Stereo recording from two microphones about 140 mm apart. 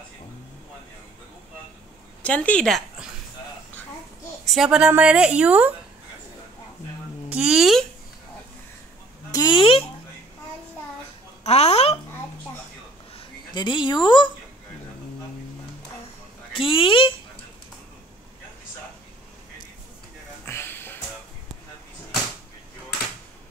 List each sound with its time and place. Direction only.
2.2 s speech: 10° left (ahead or behind)
4.5 s a woman's voice: 5° right (ahead or behind)
7.2 s speech: 5° right (ahead or behind)
9.3 s speech: 30° left (ahead or behind)
11.4 s speech: 50° left (ahead or behind)
13.5 s speech: 30° left (ahead or behind)
16.5 s speech: 35° left (ahead or behind)
20.4 s music: 15° left (ahead or behind)